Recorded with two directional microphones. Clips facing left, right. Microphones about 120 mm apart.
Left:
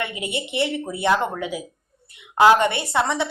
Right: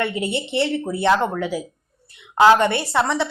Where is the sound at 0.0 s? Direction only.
15° left (ahead or behind).